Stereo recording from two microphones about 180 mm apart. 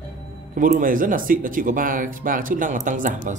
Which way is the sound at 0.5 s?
50° right (ahead or behind).